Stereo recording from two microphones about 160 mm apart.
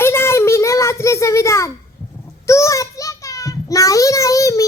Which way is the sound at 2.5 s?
20° left (ahead or behind).